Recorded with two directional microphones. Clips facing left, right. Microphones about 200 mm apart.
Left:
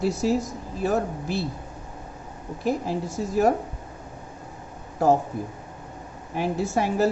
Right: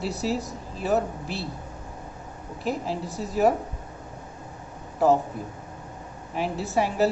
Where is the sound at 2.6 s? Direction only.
50° left (ahead or behind).